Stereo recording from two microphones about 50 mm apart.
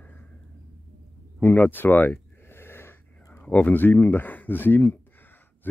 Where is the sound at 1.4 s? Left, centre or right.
Left.